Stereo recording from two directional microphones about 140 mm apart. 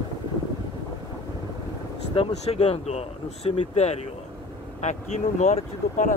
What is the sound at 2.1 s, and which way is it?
Speech, 45° left (ahead or behind).